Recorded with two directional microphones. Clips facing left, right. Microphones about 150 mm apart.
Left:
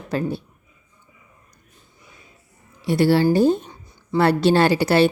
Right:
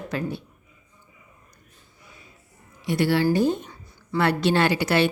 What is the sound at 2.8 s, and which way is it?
A woman's voice, 30° left (ahead or behind).